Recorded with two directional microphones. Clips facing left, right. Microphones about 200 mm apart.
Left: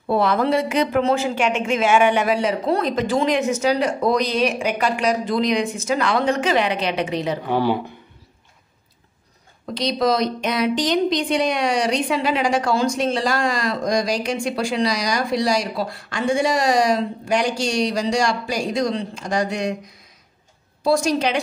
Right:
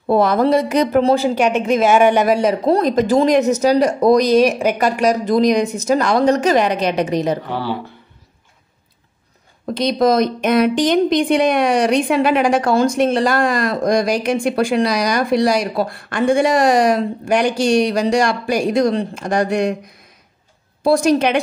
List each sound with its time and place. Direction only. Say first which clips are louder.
0.0 s speech: right 5 dB; 45° right (ahead or behind)
7.4 s speech: left 3 dB; 15° left (ahead or behind)
9.8 s speech: right 5 dB; 50° right (ahead or behind)
20.8 s speech: right 5 dB; 55° right (ahead or behind)